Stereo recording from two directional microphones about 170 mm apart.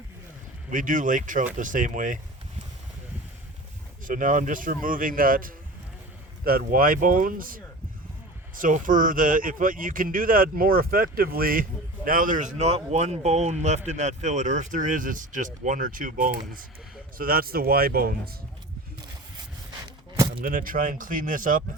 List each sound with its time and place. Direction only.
0.7 s a man's voice: 50° right (ahead or behind)
4.0 s a man's voice: 50° right (ahead or behind)
20.4 s a man's voice: 55° right (ahead or behind)